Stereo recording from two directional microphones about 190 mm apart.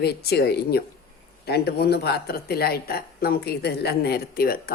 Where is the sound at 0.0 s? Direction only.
55° left (ahead or behind).